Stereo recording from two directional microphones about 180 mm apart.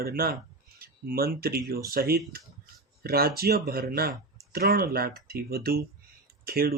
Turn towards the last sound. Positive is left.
turn(degrees=-55)  # may be behind; listen again after turning